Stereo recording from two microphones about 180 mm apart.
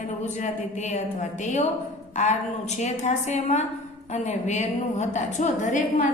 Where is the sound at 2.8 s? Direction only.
40° left (ahead or behind).